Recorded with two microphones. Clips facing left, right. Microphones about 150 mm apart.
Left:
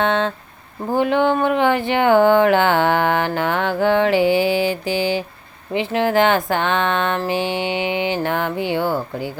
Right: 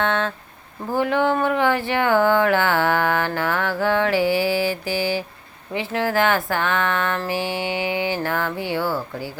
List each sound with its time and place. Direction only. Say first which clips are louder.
0.0 s speech: left 3 dB; 20° left (ahead or behind)